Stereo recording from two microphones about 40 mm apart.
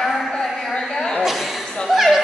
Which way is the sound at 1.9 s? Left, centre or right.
Centre.